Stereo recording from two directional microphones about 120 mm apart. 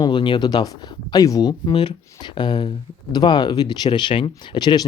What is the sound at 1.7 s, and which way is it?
Speech, 45° left (ahead or behind).